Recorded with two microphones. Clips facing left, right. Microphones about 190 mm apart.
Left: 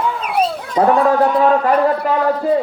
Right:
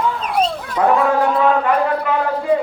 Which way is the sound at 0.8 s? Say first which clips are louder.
Left 2 dB; 35° left (ahead or behind).